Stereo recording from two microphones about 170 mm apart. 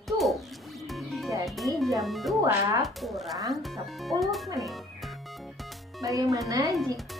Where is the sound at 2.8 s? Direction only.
Centre (ahead or behind).